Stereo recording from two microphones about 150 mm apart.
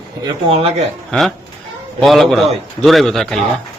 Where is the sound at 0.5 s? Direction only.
45° right (ahead or behind).